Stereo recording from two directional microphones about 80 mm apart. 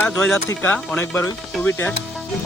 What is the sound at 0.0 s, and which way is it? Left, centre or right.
Speech, centre.